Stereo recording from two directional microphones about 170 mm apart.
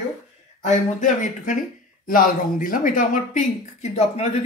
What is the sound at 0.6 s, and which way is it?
Speech, 45° left (ahead or behind).